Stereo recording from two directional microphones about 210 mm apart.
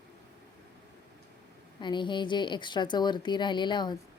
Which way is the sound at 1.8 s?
20° left (ahead or behind).